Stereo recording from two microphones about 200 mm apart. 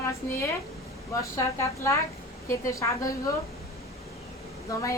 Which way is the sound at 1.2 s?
15° left (ahead or behind).